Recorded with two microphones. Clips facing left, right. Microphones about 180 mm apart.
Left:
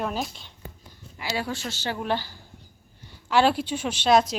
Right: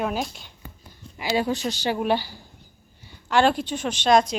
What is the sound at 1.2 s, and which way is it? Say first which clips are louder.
Speech: right 6 dB; 15° right (ahead or behind).